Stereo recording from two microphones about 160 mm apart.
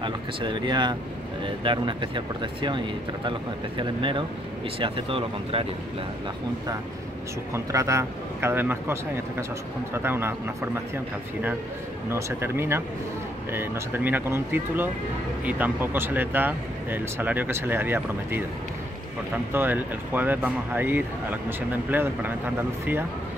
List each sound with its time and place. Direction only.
0.0 s speech: 30° right (ahead or behind)
7.5 s speech: 20° right (ahead or behind)
12.1 s speech: 15° right (ahead or behind)
19.5 s speech: 10° right (ahead or behind)